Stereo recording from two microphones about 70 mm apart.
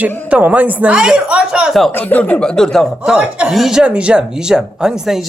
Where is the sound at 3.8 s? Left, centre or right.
Centre.